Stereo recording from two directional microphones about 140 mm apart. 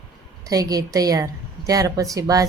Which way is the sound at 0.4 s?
25° right (ahead or behind).